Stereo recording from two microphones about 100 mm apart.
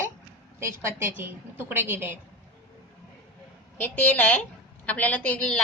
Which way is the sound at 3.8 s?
15° left (ahead or behind).